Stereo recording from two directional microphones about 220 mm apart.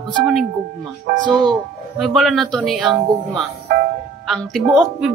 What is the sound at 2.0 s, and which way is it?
Speech, centre (ahead or behind).